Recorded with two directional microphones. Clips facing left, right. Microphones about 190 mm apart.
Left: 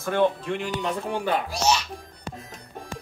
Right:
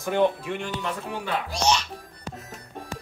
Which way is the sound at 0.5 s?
10° left (ahead or behind).